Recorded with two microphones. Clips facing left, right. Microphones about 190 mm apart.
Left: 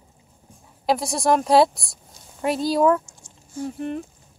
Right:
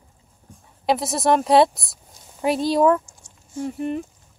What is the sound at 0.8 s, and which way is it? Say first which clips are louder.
Speech: right 1 dB; centre (ahead or behind).